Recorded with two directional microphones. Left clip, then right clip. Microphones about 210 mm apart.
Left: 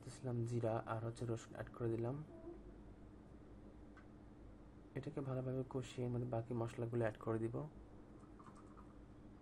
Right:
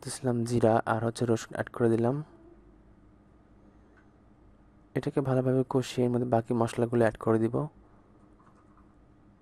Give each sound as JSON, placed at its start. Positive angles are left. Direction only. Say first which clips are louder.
{"t": 0.0, "sound": "speech", "louder": "right 16 dB", "side_deg": -50}
{"t": 4.9, "sound": "speech", "louder": "right 18 dB", "side_deg": -55}